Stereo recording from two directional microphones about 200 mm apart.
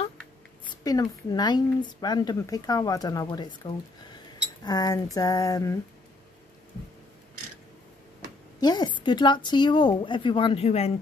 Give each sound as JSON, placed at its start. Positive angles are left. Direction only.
{"t": 0.8, "sound": "speech", "side_deg": 20}
{"t": 4.6, "sound": "a sound", "side_deg": 20}
{"t": 8.5, "sound": "speech", "side_deg": 20}